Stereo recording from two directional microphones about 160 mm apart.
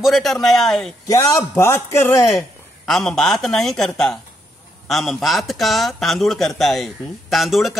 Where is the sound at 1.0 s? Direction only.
20° left (ahead or behind).